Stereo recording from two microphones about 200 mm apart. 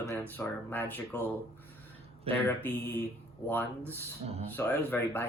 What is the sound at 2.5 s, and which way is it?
Speech, 10° left (ahead or behind).